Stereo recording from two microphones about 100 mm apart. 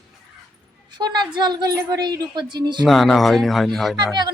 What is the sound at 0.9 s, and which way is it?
Speech, 50° right (ahead or behind).